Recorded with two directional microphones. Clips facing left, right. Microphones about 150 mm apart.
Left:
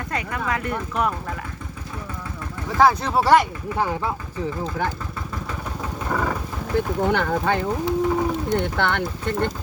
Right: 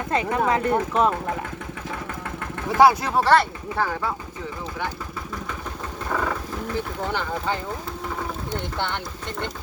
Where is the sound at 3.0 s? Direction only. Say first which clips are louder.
Left 2 dB; 10° left (ahead or behind).